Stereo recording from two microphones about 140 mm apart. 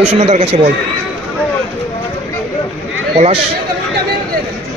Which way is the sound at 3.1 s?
45° right (ahead or behind).